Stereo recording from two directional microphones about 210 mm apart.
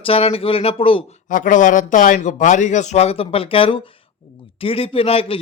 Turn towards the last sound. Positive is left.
turn(degrees=25)  # may be behind; listen again after turning